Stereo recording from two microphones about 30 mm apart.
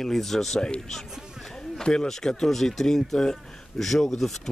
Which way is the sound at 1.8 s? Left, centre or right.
Left.